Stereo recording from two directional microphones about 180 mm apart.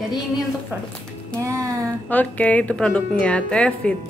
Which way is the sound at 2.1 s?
10° left (ahead or behind).